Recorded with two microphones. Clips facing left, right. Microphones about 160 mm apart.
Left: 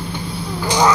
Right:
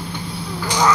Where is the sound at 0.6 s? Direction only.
15° left (ahead or behind).